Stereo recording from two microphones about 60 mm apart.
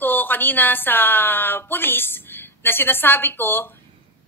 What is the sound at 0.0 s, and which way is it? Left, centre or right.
Speech, left.